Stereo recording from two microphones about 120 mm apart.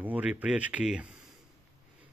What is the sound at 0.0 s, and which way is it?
Speech, 10° right (ahead or behind).